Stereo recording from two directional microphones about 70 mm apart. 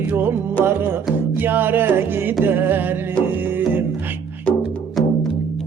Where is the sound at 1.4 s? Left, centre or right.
Right.